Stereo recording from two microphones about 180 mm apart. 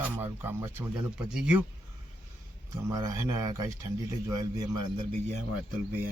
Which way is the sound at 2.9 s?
20° right (ahead or behind).